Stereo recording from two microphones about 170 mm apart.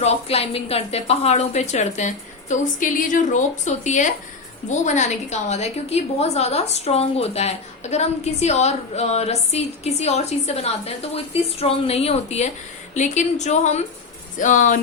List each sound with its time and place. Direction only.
0.0 s a woman's voice: 35° left (ahead or behind)